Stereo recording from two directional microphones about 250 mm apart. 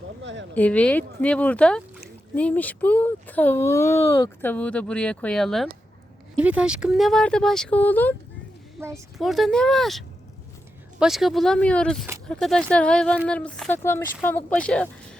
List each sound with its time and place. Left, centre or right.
0.2 s speech: right
0.5 s speech: centre
8.8 s speech: centre
11.0 s speech: centre